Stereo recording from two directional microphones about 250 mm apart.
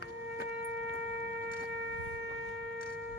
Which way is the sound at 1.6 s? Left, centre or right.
Right.